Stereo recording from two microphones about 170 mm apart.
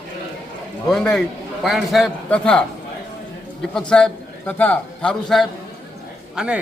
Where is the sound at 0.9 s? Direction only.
5° left (ahead or behind).